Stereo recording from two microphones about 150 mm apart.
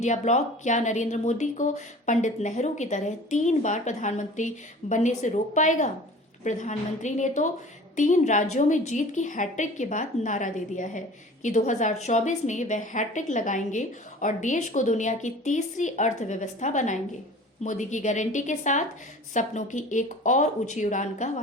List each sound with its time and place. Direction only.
0.0 s a woman's voice: 50° left (ahead or behind)